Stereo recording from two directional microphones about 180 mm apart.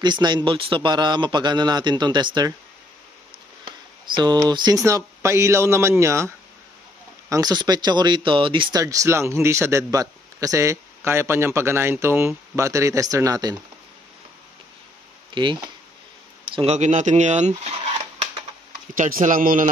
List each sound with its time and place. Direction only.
0.0 s a man's voice: 25° right (ahead or behind)
4.1 s speech: 25° right (ahead or behind)
15.3 s a man's voice: 25° right (ahead or behind)
16.5 s speech: 35° right (ahead or behind)
19.2 s speech: 50° right (ahead or behind)